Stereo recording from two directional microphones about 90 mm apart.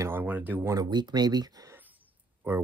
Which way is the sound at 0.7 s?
50° right (ahead or behind).